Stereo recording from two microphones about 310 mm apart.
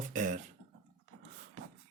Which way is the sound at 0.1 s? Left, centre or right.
Right.